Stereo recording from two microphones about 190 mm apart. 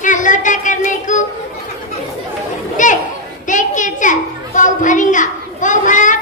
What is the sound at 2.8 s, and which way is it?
Chatter, 40° left (ahead or behind).